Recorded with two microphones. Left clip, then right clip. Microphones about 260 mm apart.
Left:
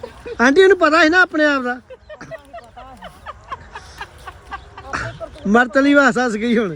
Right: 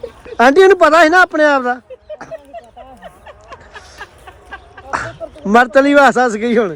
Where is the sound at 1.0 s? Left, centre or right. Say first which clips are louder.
Right 4 dB; centre.